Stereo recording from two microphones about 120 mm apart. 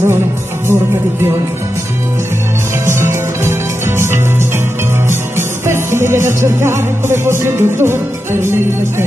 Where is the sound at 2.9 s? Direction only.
20° right (ahead or behind).